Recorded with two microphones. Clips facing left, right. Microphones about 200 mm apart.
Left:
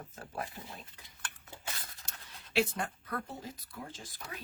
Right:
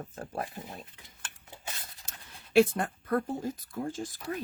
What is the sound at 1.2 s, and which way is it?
Stir, 25° right (ahead or behind).